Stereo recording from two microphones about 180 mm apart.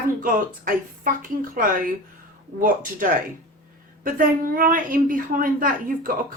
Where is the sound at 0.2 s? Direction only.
50° right (ahead or behind).